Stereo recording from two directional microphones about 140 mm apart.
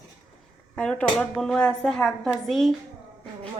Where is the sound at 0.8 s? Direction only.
10° left (ahead or behind).